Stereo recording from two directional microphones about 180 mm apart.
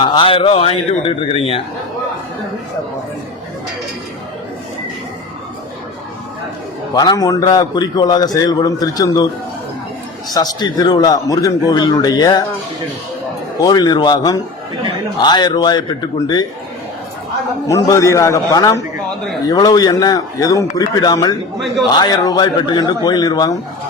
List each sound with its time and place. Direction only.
0.0 s a man's voice: 25° left (ahead or behind)
6.9 s a man's voice: 20° left (ahead or behind)
10.3 s a man's voice: 20° left (ahead or behind)
13.6 s a man's voice: 20° left (ahead or behind)
17.7 s a man's voice: 20° left (ahead or behind)